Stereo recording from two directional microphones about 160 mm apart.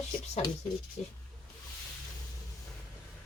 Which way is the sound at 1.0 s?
45° left (ahead or behind).